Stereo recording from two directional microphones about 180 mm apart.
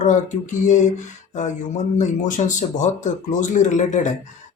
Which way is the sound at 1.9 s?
45° left (ahead or behind).